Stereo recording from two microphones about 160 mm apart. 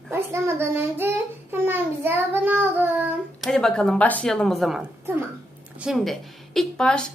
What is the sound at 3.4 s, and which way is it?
A woman's voice, 5° left (ahead or behind).